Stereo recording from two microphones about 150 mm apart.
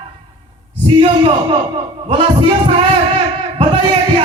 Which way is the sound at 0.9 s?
40° right (ahead or behind).